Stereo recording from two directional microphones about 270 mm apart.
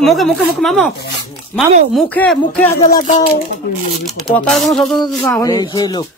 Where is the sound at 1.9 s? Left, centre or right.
Centre.